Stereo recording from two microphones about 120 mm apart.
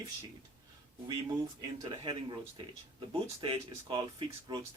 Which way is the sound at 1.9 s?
45° right (ahead or behind).